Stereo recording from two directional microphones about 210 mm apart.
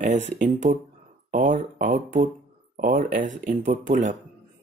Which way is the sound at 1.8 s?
40° right (ahead or behind).